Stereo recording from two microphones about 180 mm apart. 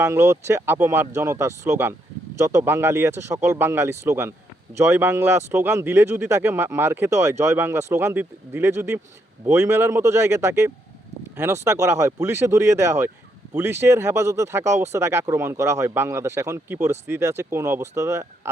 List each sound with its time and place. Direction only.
0.0 s speech: 15° right (ahead or behind)